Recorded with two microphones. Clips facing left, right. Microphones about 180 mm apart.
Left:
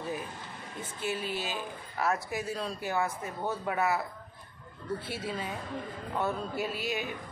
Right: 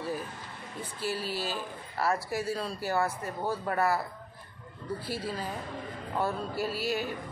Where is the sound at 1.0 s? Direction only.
35° right (ahead or behind).